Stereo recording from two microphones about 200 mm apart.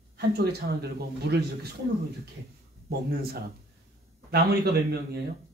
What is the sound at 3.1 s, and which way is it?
Speech, 50° right (ahead or behind).